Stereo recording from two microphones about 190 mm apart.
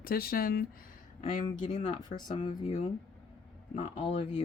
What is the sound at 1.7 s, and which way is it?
Speech, 20° left (ahead or behind).